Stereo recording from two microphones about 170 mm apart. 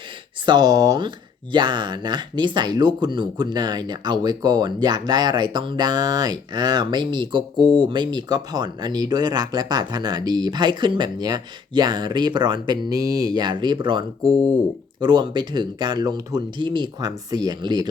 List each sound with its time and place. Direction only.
0.4 s speech: 25° right (ahead or behind)
14.3 s speech: 5° left (ahead or behind)
15.0 s speech: 25° right (ahead or behind)